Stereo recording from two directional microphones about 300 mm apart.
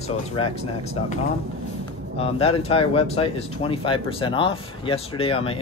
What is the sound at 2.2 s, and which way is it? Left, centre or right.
Speech, centre.